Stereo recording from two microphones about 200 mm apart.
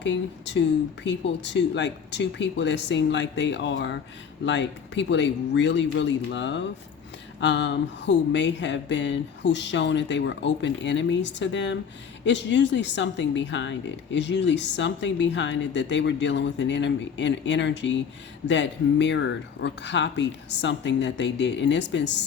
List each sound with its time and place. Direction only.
0.0 s speech: 60° left (ahead or behind)